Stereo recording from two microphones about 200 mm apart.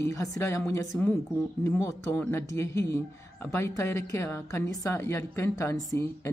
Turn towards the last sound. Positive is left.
turn(degrees=15)  # may be behind; listen again after turning